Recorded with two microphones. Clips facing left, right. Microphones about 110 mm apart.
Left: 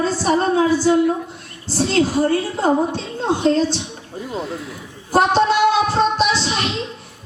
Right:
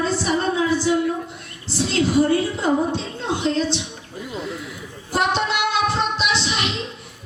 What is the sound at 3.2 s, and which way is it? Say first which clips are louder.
Speech: left 6 dB; 45° left (ahead or behind).